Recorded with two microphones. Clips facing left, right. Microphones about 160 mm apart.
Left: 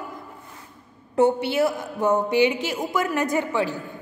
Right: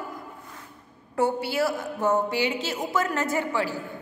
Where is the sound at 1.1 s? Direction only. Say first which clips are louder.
Left 5 dB; 20° left (ahead or behind).